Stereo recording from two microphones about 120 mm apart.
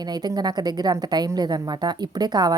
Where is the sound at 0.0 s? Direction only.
35° right (ahead or behind).